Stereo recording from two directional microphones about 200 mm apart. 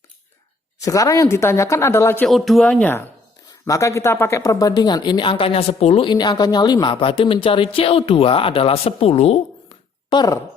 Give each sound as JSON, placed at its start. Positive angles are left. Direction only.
{"t": 0.8, "sound": "speech", "side_deg": 15}
{"t": 2.2, "sound": "speech", "side_deg": 0}